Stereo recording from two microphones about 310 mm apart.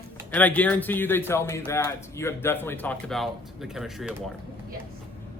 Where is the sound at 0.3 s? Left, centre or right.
Centre.